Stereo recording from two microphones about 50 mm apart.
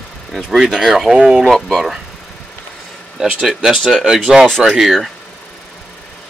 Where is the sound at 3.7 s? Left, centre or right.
Centre.